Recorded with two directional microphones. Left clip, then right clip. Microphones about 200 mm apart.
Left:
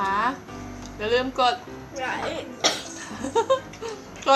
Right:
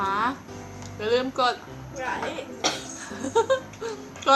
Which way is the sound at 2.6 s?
25° left (ahead or behind).